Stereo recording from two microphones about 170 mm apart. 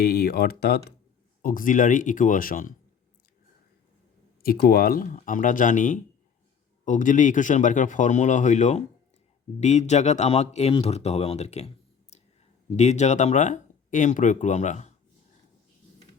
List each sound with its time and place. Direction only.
0.0 s speech: 65° left (ahead or behind)
1.4 s speech: 55° left (ahead or behind)
4.4 s speech: 65° left (ahead or behind); by 11.7 s 40° left (ahead or behind)
12.1 s clicking: 40° left (ahead or behind)
12.7 s speech: 40° left (ahead or behind)